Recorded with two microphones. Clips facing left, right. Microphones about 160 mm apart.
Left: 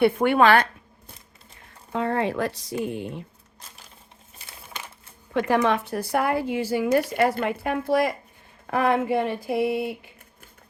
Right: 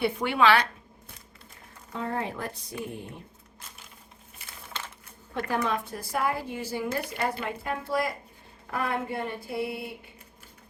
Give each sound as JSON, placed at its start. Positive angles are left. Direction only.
{"t": 0.0, "sound": "a woman's voice", "side_deg": 55}
{"t": 1.9, "sound": "a woman's voice", "side_deg": 75}
{"t": 5.3, "sound": "a woman's voice", "side_deg": 90}
{"t": 7.4, "sound": "a woman's voice", "side_deg": 75}